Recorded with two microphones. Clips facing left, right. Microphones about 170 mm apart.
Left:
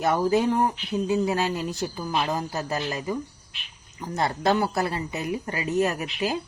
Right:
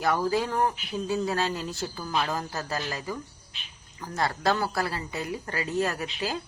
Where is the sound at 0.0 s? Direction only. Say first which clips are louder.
Left 4 dB; 20° left (ahead or behind).